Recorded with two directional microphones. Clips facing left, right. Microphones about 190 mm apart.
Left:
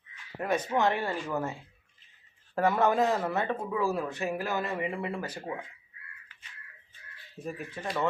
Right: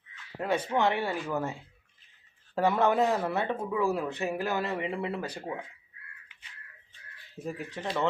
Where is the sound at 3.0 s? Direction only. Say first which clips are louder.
Even; 10° right (ahead or behind).